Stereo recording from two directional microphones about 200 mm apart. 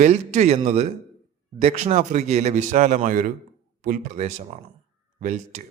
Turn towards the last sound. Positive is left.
turn(degrees=-35)  # may be behind; listen again after turning